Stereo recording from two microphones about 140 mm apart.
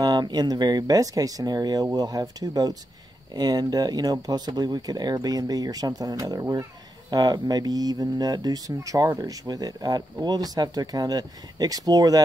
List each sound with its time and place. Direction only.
0.0 s speech: 30° right (ahead or behind)